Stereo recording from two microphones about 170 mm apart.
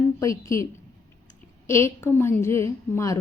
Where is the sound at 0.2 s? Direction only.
20° left (ahead or behind).